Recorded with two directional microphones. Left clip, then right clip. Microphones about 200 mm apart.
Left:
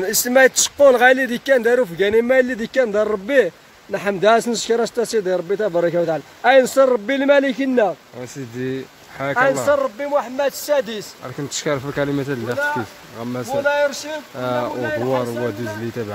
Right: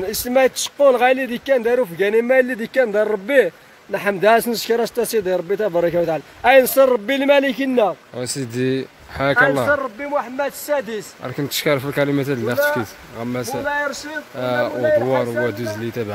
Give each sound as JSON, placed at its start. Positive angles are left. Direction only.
{"t": 0.0, "sound": "speech", "side_deg": 10}
{"t": 8.2, "sound": "speech", "side_deg": -40}
{"t": 9.7, "sound": "a man's voice", "side_deg": 60}
{"t": 11.4, "sound": "speech", "side_deg": -10}